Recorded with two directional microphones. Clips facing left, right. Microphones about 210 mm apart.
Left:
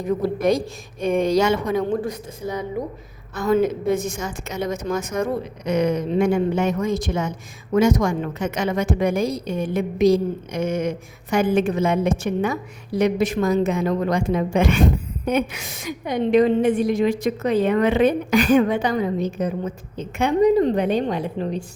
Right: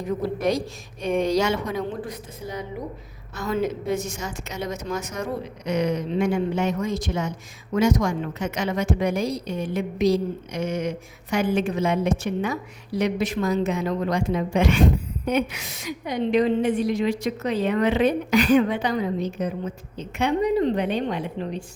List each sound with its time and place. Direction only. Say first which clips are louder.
0.4 s a woman's voice: left 4 dB; 50° left (ahead or behind)
3.4 s a woman's voice: left 6 dB; 50° left (ahead or behind)